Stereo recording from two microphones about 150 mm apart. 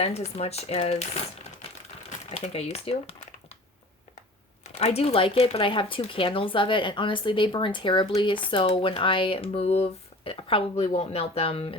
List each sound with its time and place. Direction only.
0.0 s speech: 45° left (ahead or behind)
4.6 s speech: 45° left (ahead or behind)